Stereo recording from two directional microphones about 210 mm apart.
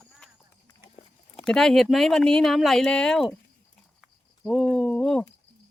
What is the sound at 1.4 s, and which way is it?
Speech, centre (ahead or behind).